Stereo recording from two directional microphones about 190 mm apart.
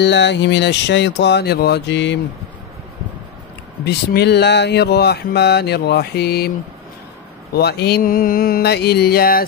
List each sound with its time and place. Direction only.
0.0 s speech: 65° left (ahead or behind)
3.8 s speech: 60° left (ahead or behind)
7.5 s mantra: 60° left (ahead or behind)